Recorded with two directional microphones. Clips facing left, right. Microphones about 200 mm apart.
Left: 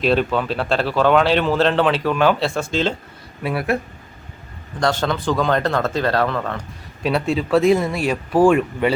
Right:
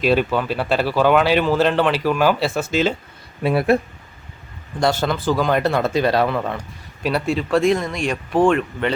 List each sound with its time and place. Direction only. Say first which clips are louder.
0.0 s speech: even; 5° right (ahead or behind)
3.4 s speech: right 5 dB; 25° right (ahead or behind)
4.8 s speech: right 1 dB; 10° right (ahead or behind)
7.0 s speech: left 1 dB; centre (ahead or behind)